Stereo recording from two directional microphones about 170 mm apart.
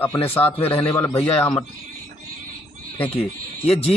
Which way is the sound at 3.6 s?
35° left (ahead or behind).